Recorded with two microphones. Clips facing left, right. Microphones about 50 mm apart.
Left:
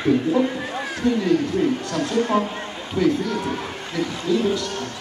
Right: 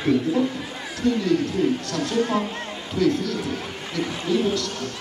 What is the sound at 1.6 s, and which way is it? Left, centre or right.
Speech, centre.